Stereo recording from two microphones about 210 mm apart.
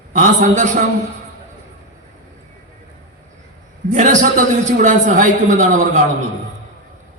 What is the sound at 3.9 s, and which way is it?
A man's voice, 35° right (ahead or behind).